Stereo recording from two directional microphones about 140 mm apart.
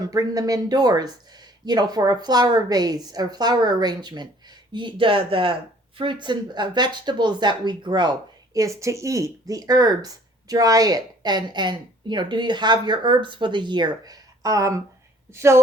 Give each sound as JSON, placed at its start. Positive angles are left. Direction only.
{"t": 0.1, "sound": "speech", "side_deg": -25}